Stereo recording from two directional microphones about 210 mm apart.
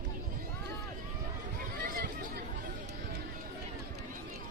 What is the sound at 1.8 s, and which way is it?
Chatter, 45° right (ahead or behind).